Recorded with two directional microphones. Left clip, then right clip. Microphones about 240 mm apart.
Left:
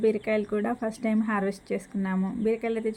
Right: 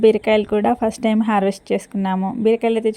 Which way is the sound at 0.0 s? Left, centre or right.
Right.